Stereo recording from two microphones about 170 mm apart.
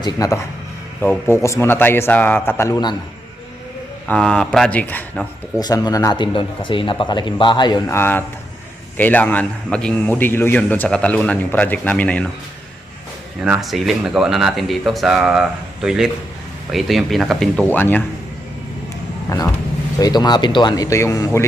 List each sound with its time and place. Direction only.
0.0 s a man's voice: 20° left (ahead or behind)
4.0 s speech: 5° left (ahead or behind)
5.5 s a man's voice: 25° left (ahead or behind)
13.4 s speech: 5° right (ahead or behind)
17.7 s a man's voice: 10° left (ahead or behind)
19.3 s a man's voice: 15° left (ahead or behind)